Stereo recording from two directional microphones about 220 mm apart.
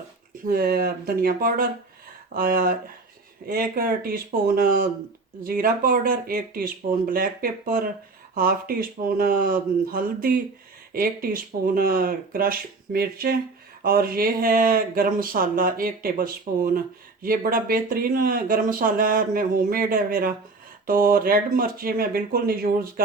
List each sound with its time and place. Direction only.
0.4 s speech: 40° right (ahead or behind)